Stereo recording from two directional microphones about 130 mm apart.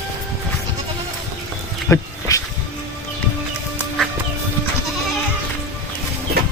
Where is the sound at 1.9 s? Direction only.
25° left (ahead or behind).